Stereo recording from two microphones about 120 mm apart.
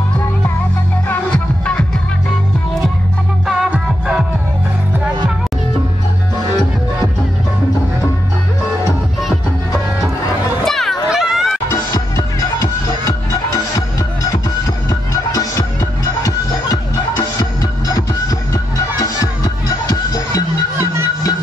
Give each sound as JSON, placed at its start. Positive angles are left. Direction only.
{"t": 1.3, "sound": "music", "side_deg": 10}
{"t": 3.4, "sound": "music", "side_deg": -5}
{"t": 10.6, "sound": "a sound", "side_deg": 0}
{"t": 11.1, "sound": "music", "side_deg": -5}
{"t": 11.7, "sound": "music", "side_deg": 30}
{"t": 20.7, "sound": "music", "side_deg": -20}